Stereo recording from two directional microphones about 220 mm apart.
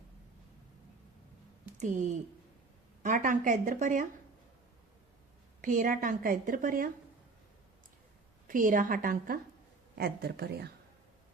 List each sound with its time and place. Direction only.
1.8 s a woman's voice: 35° right (ahead or behind)
5.6 s a woman's voice: 35° right (ahead or behind)
8.4 s a woman's voice: 35° right (ahead or behind)